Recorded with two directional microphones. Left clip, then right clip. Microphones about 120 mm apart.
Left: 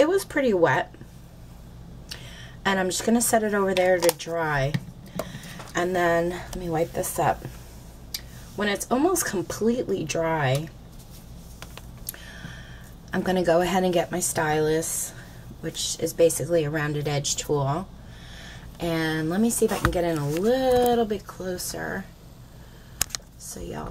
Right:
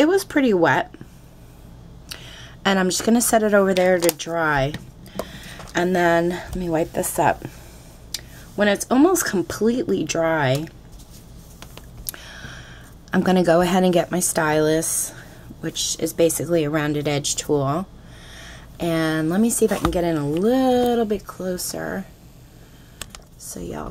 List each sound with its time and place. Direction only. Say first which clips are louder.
0.0 s speech: right 3 dB; 30° right (ahead or behind)
2.3 s a woman's voice: right 4 dB; 30° right (ahead or behind)
5.2 s a sound: right 2 dB; 10° right (ahead or behind)
5.7 s speech: right 4 dB; 25° right (ahead or behind)
8.1 s a sound: right 3 dB; 25° right (ahead or behind)
9.4 s speech: right 4 dB; 20° right (ahead or behind)
12.1 s a sound: right 6 dB; 30° right (ahead or behind)
13.1 s speech: right 4 dB; 30° right (ahead or behind)
16.2 s speech: right 1 dB; 30° right (ahead or behind)